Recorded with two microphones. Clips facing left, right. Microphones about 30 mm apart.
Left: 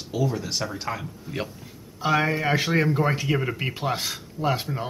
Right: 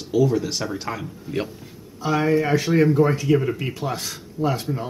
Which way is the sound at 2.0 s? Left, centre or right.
Left.